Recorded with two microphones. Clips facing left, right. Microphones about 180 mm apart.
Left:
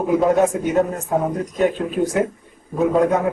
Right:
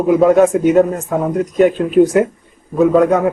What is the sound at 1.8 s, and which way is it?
Speech, 80° right.